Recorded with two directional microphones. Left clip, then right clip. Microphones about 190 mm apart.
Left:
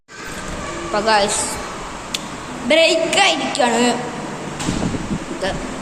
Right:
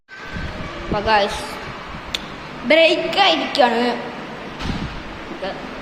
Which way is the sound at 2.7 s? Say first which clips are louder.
Even; 30° right (ahead or behind).